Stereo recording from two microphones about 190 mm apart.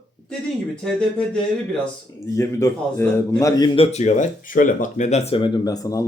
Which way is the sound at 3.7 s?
35° left (ahead or behind).